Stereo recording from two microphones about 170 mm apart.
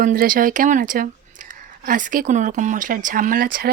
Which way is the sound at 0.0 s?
55° right (ahead or behind).